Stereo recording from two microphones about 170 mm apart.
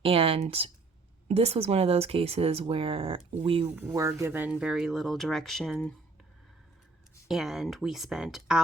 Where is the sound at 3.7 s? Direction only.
15° right (ahead or behind); by 5.9 s centre (ahead or behind).